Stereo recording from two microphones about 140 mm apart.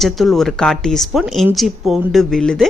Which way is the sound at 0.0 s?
Centre (ahead or behind).